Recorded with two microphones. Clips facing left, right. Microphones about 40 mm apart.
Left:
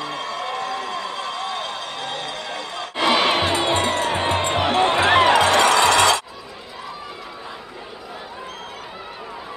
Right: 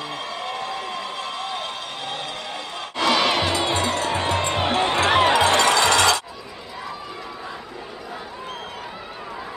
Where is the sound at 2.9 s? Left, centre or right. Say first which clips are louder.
Left 2 dB; left.